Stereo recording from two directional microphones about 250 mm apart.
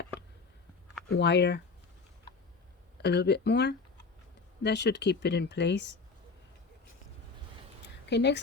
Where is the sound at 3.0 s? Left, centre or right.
Left.